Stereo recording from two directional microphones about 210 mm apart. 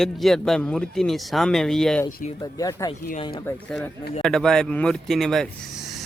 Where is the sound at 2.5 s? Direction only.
15° left (ahead or behind).